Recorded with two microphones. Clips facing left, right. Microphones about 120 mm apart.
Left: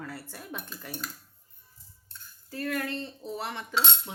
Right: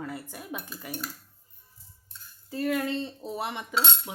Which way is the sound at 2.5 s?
20° right (ahead or behind).